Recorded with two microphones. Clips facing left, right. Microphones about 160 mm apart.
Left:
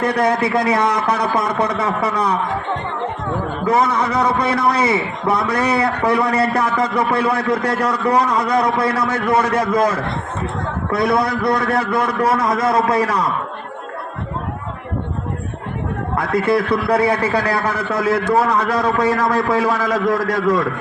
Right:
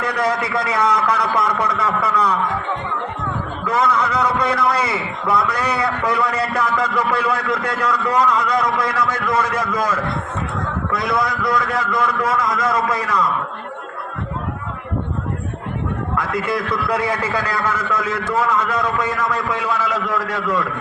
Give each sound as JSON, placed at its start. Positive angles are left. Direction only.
{"t": 0.1, "sound": "a man's voice", "side_deg": 30}
{"t": 4.5, "sound": "a man's voice", "side_deg": 30}
{"t": 16.1, "sound": "a man's voice", "side_deg": 35}